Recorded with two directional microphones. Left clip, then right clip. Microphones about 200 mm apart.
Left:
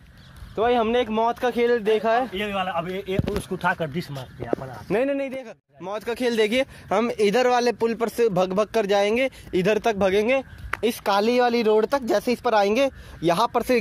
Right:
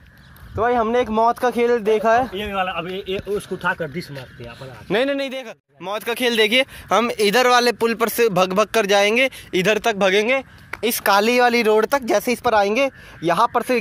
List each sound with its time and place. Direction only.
0.6 s speech: 10° right (ahead or behind)
0.9 s speech: 30° right (ahead or behind)
2.3 s a man's voice: 15° left (ahead or behind)
2.9 s speech: 60° left (ahead or behind)
4.8 s speech: 10° right (ahead or behind); by 13.7 s 10° left (ahead or behind)